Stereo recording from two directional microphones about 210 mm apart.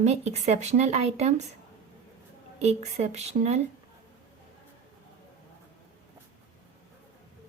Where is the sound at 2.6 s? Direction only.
30° right (ahead or behind).